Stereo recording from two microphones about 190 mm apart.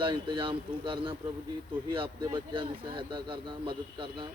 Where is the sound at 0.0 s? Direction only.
25° right (ahead or behind).